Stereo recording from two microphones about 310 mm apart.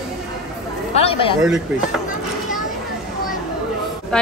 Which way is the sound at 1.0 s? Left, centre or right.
Centre.